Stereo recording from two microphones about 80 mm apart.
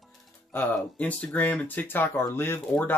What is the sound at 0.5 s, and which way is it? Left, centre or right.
Speech, centre.